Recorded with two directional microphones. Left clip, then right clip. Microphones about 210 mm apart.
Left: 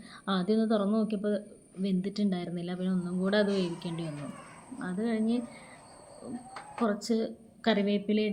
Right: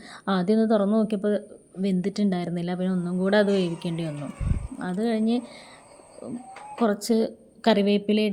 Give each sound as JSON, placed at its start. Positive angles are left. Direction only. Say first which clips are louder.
{"t": 0.1, "sound": "a woman's voice", "louder": "right 6 dB", "side_deg": -35}